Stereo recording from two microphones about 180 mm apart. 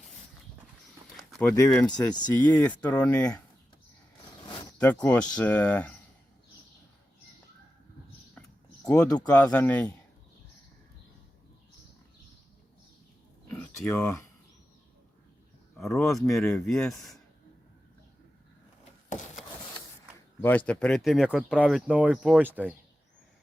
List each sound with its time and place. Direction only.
1.5 s speech: 20° left (ahead or behind)
4.8 s speech: 10° left (ahead or behind)
8.4 s a sound: 10° left (ahead or behind)
8.9 s speech: 5° left (ahead or behind)
13.5 s a sound: 10° left (ahead or behind)
15.8 s speech: centre (ahead or behind)
20.4 s speech: 10° left (ahead or behind); by 22.7 s 10° right (ahead or behind)